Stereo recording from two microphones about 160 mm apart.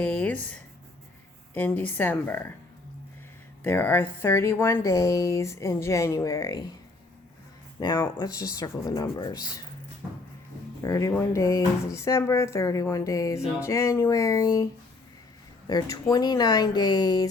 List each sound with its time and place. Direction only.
0.0 s a woman's voice: 10° left (ahead or behind)
3.6 s a woman's voice: 10° left (ahead or behind)
7.8 s a woman's voice: 25° left (ahead or behind)
10.8 s a woman's voice: 20° left (ahead or behind)